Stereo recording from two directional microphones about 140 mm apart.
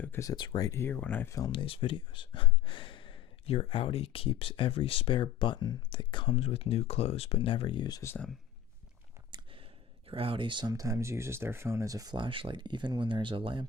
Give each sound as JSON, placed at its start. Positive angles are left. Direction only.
{"t": 0.0, "sound": "speech", "side_deg": 20}
{"t": 0.3, "sound": "speech", "side_deg": 35}
{"t": 0.7, "sound": "speech", "side_deg": 15}
{"t": 1.5, "sound": "speech", "side_deg": 40}
{"t": 8.0, "sound": "speech", "side_deg": 15}
{"t": 9.3, "sound": "a sound", "side_deg": -40}
{"t": 10.1, "sound": "speech", "side_deg": -40}